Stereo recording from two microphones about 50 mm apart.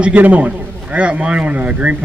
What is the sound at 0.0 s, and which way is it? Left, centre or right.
A man's voice, right.